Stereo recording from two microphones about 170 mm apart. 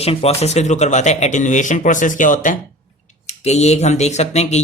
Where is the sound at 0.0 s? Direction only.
35° left (ahead or behind).